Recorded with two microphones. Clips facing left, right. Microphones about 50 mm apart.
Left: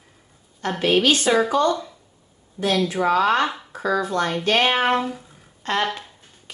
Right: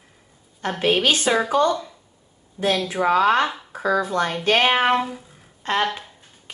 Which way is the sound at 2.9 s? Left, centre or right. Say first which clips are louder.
Right 3 dB; centre.